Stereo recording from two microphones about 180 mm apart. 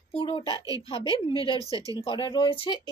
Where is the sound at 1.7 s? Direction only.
20° right (ahead or behind).